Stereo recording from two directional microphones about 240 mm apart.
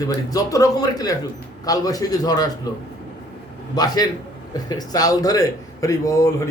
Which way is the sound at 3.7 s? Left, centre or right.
Centre.